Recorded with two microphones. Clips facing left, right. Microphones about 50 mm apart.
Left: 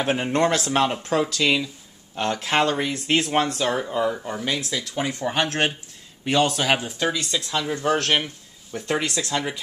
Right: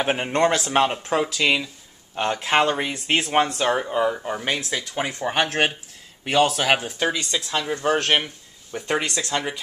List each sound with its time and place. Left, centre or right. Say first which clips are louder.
0.0 s speech: right 1 dB; centre
6.2 s speech: right 1 dB; centre